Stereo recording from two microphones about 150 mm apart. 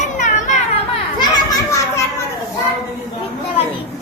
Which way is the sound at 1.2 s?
25° left (ahead or behind).